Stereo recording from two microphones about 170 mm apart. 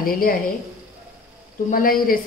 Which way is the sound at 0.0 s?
55° left (ahead or behind).